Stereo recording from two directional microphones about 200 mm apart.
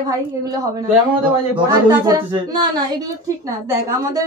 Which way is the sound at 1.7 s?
20° right (ahead or behind).